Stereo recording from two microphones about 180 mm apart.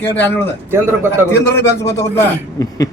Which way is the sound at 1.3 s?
15° left (ahead or behind).